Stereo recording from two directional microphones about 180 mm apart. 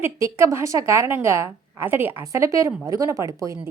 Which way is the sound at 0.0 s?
15° right (ahead or behind).